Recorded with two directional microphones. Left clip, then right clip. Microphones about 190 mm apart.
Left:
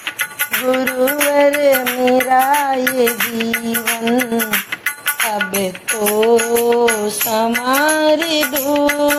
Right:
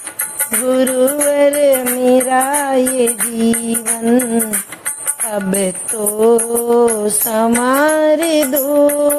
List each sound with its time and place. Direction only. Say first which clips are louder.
0.7 s music: right 4 dB; 40° right (ahead or behind)
6.1 s music: right 1 dB; 45° right (ahead or behind)